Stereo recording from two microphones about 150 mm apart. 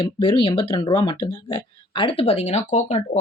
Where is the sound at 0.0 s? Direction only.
35° left (ahead or behind).